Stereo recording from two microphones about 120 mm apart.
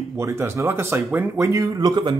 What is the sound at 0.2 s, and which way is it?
Speech, 20° right (ahead or behind).